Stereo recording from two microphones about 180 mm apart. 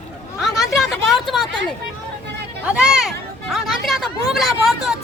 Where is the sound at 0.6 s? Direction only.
Centre (ahead or behind).